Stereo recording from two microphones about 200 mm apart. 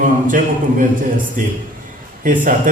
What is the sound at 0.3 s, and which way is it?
A man's voice, 40° right (ahead or behind).